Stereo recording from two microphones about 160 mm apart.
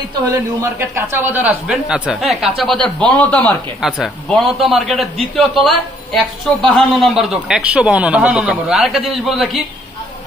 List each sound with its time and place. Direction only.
0.6 s speech: 15° right (ahead or behind); by 3.5 s 10° left (ahead or behind)
3.8 s speech: 5° right (ahead or behind)